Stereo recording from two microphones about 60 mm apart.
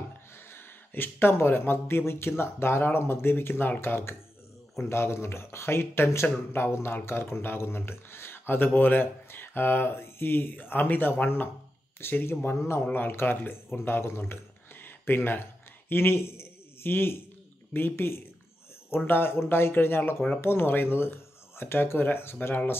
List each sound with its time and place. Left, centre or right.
0.5 s speech: left